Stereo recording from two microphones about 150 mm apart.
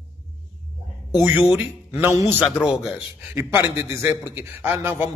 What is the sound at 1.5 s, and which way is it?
Speech, 15° right (ahead or behind).